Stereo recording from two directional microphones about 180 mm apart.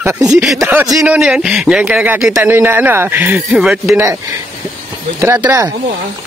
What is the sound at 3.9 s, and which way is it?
Speech, 15° right (ahead or behind).